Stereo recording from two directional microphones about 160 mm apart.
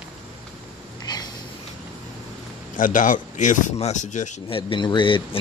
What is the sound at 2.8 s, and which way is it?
A man's voice, 55° left (ahead or behind).